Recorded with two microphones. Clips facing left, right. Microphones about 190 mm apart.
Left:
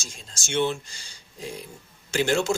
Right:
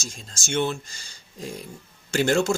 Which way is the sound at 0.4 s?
45° right (ahead or behind).